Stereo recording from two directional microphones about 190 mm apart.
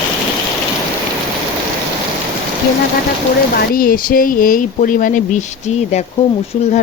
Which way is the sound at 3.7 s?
50° left (ahead or behind).